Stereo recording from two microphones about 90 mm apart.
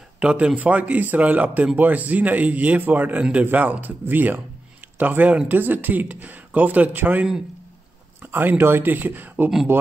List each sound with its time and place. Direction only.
0.2 s a man's voice: 10° right (ahead or behind)